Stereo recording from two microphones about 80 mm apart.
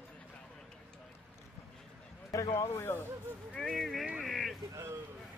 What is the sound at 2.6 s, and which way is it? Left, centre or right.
Speech, left.